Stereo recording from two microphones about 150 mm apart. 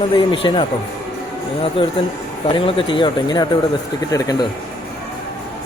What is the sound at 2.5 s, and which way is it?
Speech, 35° left (ahead or behind).